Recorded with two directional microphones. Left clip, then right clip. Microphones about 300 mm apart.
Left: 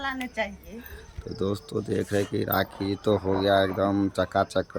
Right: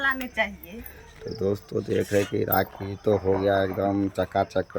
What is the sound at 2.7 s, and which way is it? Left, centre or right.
Speech, left.